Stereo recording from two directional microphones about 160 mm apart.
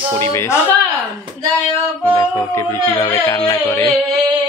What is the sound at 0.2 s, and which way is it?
Speech, 15° left (ahead or behind).